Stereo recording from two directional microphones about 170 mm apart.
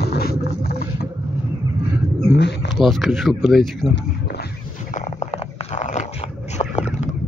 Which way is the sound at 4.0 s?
70° left (ahead or behind).